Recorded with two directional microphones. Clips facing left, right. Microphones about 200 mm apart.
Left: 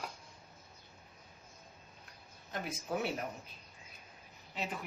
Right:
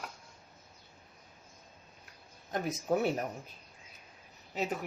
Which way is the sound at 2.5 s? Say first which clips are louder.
Right 7 dB; 45° right (ahead or behind).